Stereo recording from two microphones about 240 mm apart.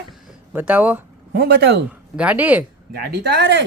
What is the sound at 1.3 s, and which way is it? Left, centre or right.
Speech, right.